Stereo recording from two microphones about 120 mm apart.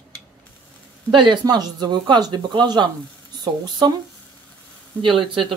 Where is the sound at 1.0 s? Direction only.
40° right (ahead or behind).